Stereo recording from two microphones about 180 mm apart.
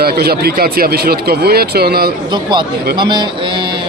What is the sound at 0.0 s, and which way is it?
Speech, 60° right (ahead or behind).